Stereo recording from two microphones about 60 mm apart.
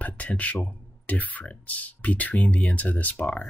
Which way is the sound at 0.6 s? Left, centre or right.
Left.